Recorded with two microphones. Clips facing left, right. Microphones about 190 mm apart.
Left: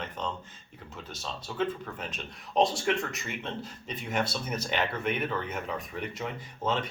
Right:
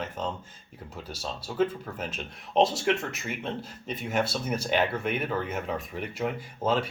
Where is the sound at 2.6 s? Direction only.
5° right (ahead or behind).